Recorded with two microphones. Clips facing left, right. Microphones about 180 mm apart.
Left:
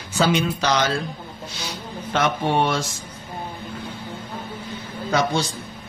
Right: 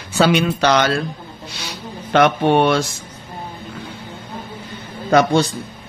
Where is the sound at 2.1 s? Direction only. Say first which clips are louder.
Right 7 dB; 70° right (ahead or behind).